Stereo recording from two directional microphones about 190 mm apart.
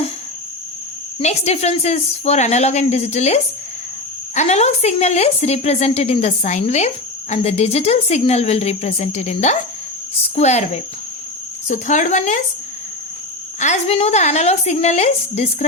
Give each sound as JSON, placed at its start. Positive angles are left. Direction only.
{"t": 1.2, "sound": "a woman's voice", "side_deg": 35}
{"t": 13.6, "sound": "a woman's voice", "side_deg": 35}